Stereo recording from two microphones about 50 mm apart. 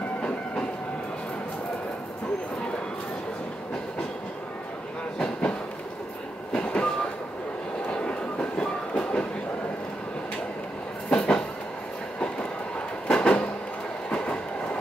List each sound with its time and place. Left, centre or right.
6.5 s train: left
11.1 s train: centre
13.1 s a sound: left
14.1 s train: left